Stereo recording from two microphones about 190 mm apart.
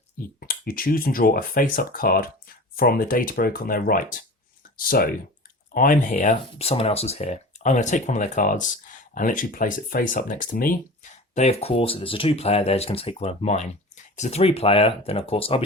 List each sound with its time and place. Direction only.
0.3 s speech: 50° left (ahead or behind)
6.6 s speech: 30° left (ahead or behind); by 10.8 s 45° left (ahead or behind)
11.3 s speech: 35° left (ahead or behind)